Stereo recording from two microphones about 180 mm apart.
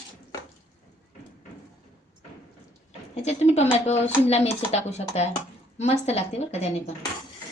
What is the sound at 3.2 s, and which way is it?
Speech, 40° left (ahead or behind).